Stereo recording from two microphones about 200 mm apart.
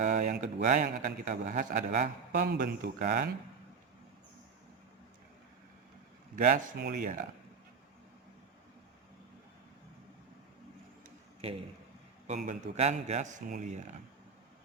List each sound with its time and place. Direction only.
0.0 s a man's voice: 35° right (ahead or behind)
2.4 s speech: 50° right (ahead or behind)
6.3 s a man's voice: 45° right (ahead or behind)
11.4 s a man's voice: 30° right (ahead or behind)